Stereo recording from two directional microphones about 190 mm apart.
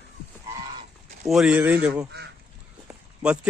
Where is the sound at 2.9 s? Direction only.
5° right (ahead or behind).